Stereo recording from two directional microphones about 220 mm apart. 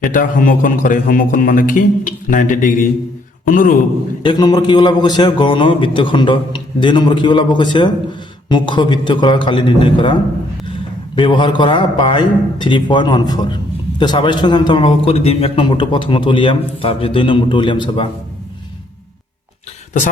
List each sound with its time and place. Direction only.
0.0 s a man's voice: 40° left (ahead or behind)
4.2 s a man's voice: 20° left (ahead or behind)